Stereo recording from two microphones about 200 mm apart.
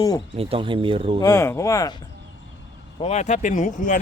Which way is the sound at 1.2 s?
15° left (ahead or behind).